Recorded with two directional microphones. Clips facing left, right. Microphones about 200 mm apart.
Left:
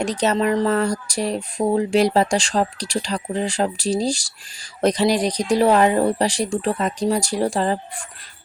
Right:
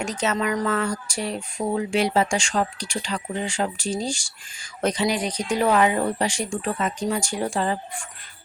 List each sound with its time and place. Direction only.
0.0 s speech: 35° left (ahead or behind)